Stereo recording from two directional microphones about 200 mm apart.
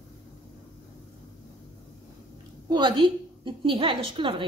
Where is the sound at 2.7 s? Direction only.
25° right (ahead or behind).